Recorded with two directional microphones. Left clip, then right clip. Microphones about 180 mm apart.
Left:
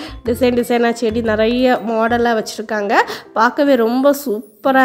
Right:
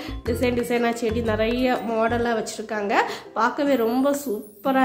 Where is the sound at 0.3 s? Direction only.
45° left (ahead or behind).